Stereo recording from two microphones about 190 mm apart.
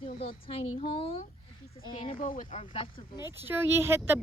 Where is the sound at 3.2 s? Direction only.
10° right (ahead or behind).